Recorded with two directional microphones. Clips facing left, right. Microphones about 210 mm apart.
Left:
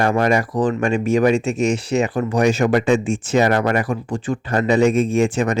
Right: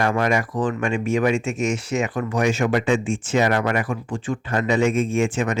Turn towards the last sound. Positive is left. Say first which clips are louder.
# left 4 dB
turn(degrees=40)  # may be behind; listen again after turning